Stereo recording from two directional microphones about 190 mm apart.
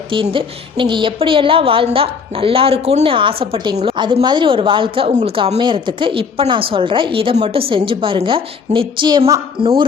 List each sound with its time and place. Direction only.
0.1 s a woman's voice: 25° right (ahead or behind)